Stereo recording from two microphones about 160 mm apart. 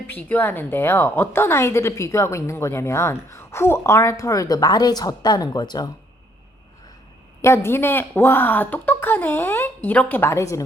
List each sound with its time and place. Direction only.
0.1 s a woman's voice: 10° left (ahead or behind)
7.4 s a woman's voice: 15° left (ahead or behind)